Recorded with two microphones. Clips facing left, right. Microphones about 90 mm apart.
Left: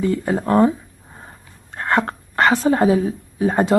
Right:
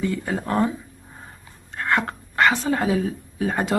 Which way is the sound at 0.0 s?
35° left (ahead or behind).